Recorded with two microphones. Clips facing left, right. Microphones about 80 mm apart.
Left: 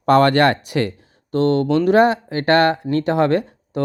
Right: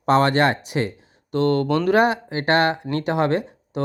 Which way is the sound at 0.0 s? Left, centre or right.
Left.